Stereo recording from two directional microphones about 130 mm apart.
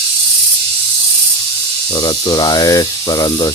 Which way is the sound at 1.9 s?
30° left (ahead or behind).